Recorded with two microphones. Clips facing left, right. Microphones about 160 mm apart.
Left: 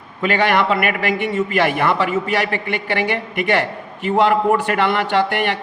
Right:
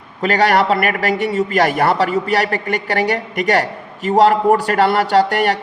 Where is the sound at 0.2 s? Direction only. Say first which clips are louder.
Right 2 dB; 40° right (ahead or behind).